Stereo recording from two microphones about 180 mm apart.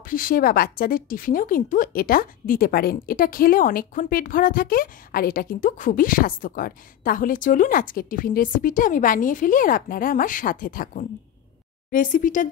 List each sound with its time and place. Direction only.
0.1 s speech: 50° left (ahead or behind)